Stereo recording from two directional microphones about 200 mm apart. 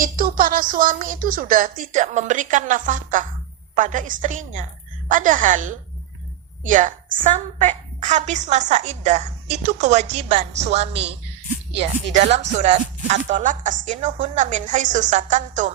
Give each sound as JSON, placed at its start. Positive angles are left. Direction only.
{"t": 0.0, "sound": "a woman's voice", "side_deg": -45}
{"t": 12.1, "sound": "a woman's voice", "side_deg": -35}